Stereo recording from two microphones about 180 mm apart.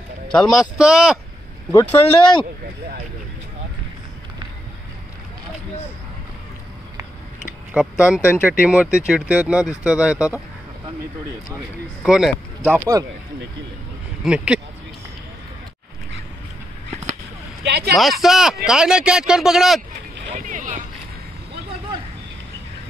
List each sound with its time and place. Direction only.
0.5 s speech: centre (ahead or behind)
1.7 s speech: 20° left (ahead or behind)
8.0 s speech: 5° right (ahead or behind)
12.0 s speech: centre (ahead or behind)
14.2 s speech: 5° right (ahead or behind)
17.6 s speech: 65° right (ahead or behind)
17.9 s speech: centre (ahead or behind)
20.3 s a sound: 45° right (ahead or behind)